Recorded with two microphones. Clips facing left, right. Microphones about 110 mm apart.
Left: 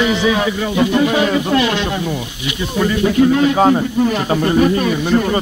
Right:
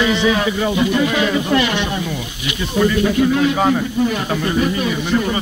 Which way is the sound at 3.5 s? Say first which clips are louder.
Left 4 dB; 30° left (ahead or behind).